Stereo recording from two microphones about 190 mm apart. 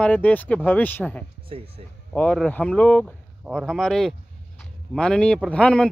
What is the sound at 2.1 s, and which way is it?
A man's voice, 5° left (ahead or behind).